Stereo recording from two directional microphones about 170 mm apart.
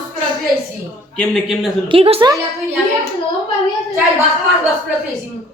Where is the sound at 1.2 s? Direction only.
Centre (ahead or behind).